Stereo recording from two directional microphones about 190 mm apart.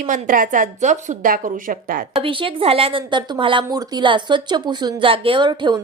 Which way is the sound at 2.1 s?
30° right (ahead or behind).